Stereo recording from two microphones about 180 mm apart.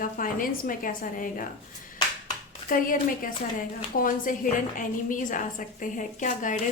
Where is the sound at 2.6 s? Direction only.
50° left (ahead or behind).